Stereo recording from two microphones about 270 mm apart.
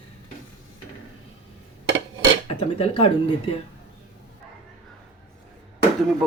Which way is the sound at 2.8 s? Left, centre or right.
Centre.